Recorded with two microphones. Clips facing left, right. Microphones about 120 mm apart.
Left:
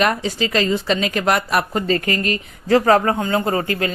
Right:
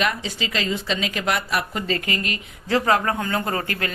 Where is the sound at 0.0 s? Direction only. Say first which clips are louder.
Left 6 dB; 45° left (ahead or behind).